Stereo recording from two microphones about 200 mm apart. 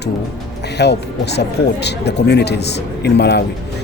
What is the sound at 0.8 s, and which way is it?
Speech, 55° left (ahead or behind).